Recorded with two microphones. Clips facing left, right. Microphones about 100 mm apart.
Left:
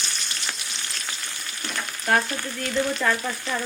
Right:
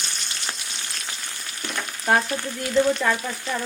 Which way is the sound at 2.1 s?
15° right (ahead or behind).